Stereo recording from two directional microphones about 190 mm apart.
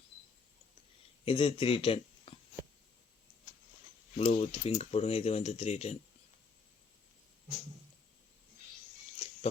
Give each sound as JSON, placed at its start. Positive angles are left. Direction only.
{"t": 1.2, "sound": "speech", "side_deg": 30}
{"t": 4.2, "sound": "speech", "side_deg": 30}
{"t": 9.1, "sound": "a sound", "side_deg": 30}